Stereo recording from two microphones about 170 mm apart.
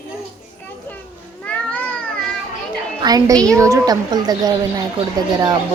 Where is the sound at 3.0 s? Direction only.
20° right (ahead or behind).